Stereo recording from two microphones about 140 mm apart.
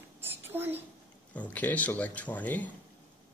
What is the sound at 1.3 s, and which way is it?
Speech, 10° left (ahead or behind).